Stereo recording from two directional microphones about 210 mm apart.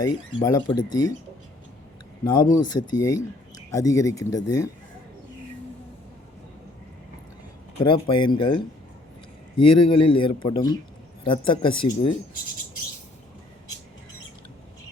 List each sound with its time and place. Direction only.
0.0 s speech: 15° left (ahead or behind)
2.2 s speech: 20° left (ahead or behind)
7.8 s speech: 25° left (ahead or behind)